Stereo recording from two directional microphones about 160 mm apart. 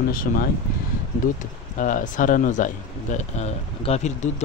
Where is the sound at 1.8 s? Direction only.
55° left (ahead or behind).